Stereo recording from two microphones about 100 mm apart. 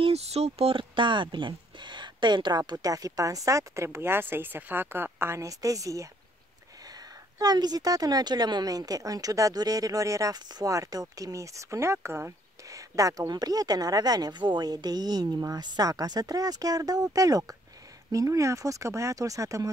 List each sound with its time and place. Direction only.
0.0 s speech: 90° right; by 6.0 s 35° right (ahead or behind)
7.3 s speech: 40° right (ahead or behind)